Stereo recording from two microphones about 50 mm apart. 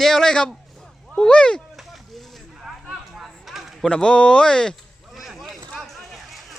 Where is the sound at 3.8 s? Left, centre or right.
Centre.